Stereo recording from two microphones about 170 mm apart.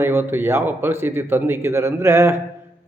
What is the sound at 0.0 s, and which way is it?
Speech, 15° right (ahead or behind).